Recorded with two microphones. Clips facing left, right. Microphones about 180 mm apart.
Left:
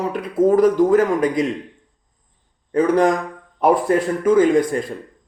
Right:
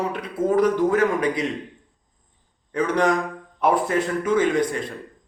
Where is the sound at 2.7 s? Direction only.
45° left (ahead or behind).